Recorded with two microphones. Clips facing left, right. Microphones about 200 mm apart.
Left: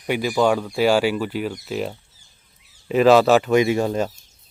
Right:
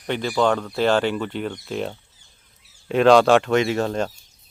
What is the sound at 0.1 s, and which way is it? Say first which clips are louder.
Speech: left 2 dB; 10° left (ahead or behind).